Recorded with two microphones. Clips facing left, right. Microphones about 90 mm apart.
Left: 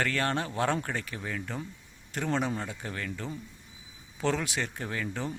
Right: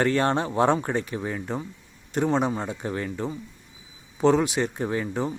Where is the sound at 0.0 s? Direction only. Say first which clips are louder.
Right 7 dB; 25° right (ahead or behind).